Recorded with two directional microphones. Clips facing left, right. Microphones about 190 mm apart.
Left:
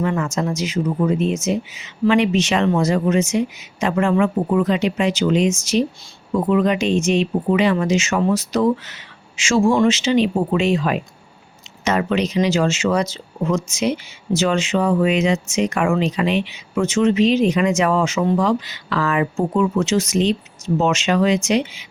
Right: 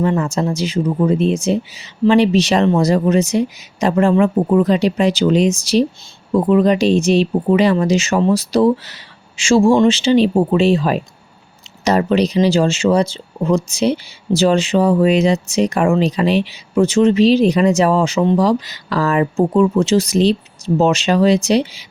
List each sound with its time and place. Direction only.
0.0 s speech: 30° right (ahead or behind)